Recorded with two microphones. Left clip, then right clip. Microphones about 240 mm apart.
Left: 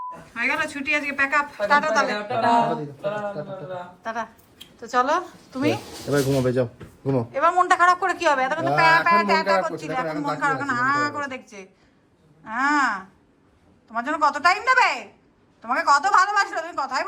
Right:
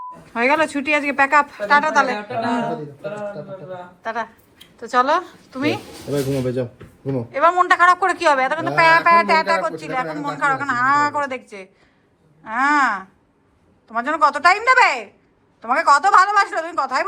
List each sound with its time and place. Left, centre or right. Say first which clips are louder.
0.3 s speech: right 7 dB; centre
4.0 s a woman's voice: right 6 dB; centre
6.1 s speech: left 1 dB; centre
7.3 s a woman's voice: right 4 dB; centre